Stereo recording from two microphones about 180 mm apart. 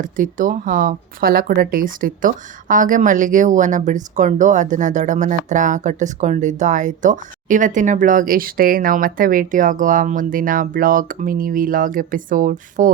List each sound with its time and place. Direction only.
0.0 s speech: 50° right (ahead or behind)